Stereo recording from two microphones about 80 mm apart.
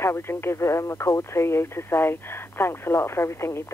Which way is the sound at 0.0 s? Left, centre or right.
Left.